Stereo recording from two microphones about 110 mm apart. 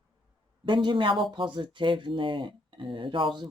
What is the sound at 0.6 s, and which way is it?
Speech, 45° right (ahead or behind).